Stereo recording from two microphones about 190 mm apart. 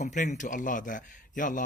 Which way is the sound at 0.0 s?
40° left (ahead or behind).